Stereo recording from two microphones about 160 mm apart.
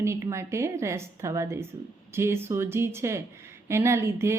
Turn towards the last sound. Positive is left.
turn(degrees=-15)  # may be behind; listen again after turning